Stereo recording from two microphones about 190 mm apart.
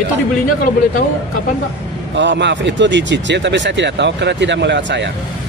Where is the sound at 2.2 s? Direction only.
65° right (ahead or behind).